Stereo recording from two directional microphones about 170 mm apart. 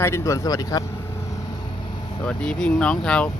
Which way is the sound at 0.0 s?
15° left (ahead or behind).